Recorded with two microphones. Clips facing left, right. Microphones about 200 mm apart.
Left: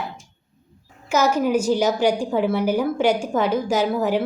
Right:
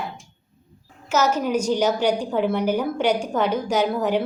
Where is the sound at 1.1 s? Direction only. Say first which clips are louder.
Left 2 dB; 10° left (ahead or behind).